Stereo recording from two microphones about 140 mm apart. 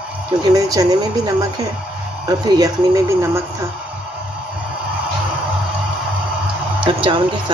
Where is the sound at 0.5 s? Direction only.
25° right (ahead or behind).